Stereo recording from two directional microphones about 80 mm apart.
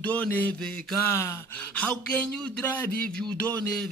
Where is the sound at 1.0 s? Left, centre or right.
Left.